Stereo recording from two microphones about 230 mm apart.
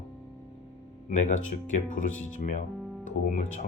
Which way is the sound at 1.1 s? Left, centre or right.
Left.